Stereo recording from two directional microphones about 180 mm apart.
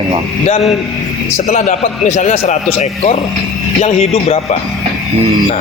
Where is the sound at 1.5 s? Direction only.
40° left (ahead or behind).